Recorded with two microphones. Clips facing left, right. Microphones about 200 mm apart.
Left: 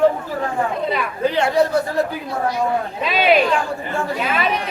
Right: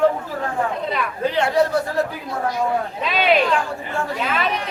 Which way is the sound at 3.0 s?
5° left (ahead or behind).